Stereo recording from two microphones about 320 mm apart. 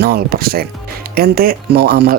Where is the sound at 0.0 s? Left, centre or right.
Right.